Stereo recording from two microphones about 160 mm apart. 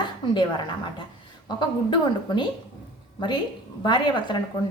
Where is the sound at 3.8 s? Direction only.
30° left (ahead or behind).